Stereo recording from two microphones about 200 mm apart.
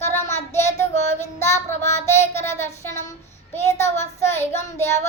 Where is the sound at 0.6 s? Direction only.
35° left (ahead or behind).